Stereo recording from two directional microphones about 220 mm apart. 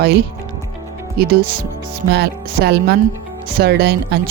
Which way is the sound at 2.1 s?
50° right (ahead or behind).